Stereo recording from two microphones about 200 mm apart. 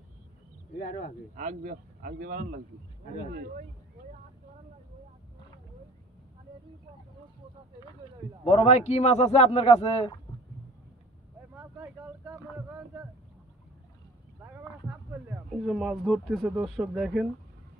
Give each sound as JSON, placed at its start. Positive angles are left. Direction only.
{"t": 0.7, "sound": "speech", "side_deg": 45}
{"t": 1.3, "sound": "speech", "side_deg": -40}
{"t": 8.5, "sound": "speech", "side_deg": 35}
{"t": 11.5, "sound": "a sound", "side_deg": -10}
{"t": 14.4, "sound": "a sound", "side_deg": -10}
{"t": 15.6, "sound": "speech", "side_deg": 0}